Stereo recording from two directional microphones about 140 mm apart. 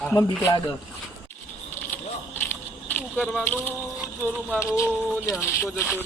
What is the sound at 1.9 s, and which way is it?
Mechanisms, 15° left (ahead or behind).